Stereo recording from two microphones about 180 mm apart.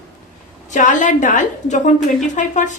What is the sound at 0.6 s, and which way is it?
Speech, 45° left (ahead or behind).